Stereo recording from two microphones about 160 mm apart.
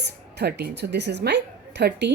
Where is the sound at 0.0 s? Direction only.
90° right.